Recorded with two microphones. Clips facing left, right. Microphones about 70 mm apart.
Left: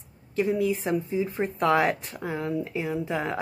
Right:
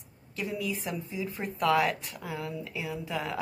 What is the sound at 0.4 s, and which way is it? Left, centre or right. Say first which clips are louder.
Speech: left 9 dB; left.